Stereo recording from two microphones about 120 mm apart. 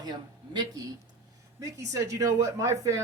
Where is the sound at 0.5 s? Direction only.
30° right (ahead or behind).